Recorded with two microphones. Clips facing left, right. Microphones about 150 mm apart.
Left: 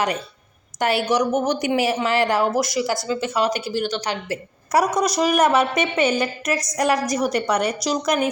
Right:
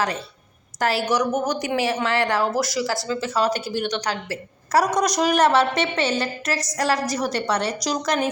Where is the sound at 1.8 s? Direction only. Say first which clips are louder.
Even; 25° left (ahead or behind).